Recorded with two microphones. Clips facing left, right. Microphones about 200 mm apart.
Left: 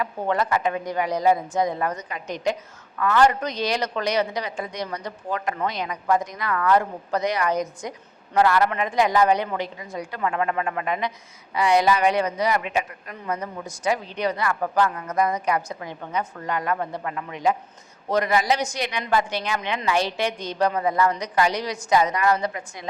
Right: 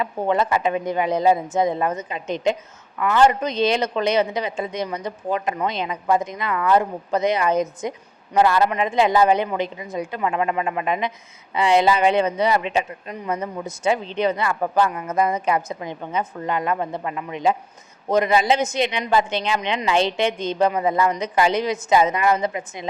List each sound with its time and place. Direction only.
0.0 s a woman's voice: 20° right (ahead or behind)